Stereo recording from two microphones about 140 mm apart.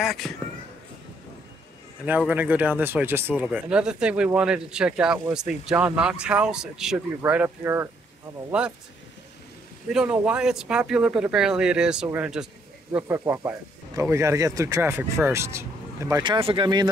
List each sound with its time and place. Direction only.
0.0 s speech: centre (ahead or behind)
2.0 s speech: 10° right (ahead or behind)
9.8 s speech: 5° right (ahead or behind)
13.9 s speech: 20° right (ahead or behind)
16.2 s speech: 40° right (ahead or behind)